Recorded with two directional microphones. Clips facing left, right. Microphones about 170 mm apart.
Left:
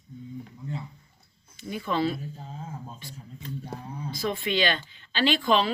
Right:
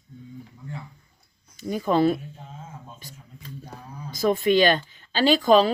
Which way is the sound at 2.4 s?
35° left (ahead or behind).